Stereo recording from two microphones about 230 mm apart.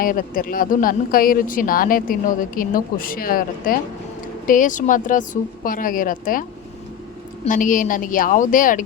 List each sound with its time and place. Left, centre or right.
0.0 s speech: left
7.4 s speech: left